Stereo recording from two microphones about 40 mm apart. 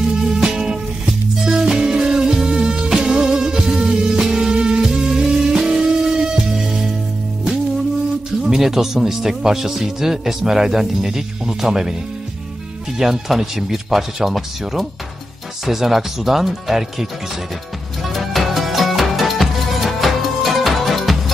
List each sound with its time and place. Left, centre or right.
0.1 s music: centre
8.5 s speech: centre
12.9 s speech: centre
18.0 s music: centre